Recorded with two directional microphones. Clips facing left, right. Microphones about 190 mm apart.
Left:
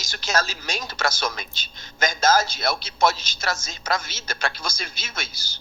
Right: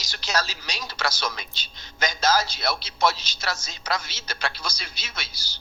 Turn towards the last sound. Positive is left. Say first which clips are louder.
# left 4 dB
turn(degrees=50)  # may be behind; listen again after turning